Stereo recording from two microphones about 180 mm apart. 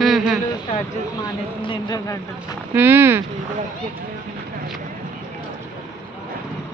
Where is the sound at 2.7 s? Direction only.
10° right (ahead or behind).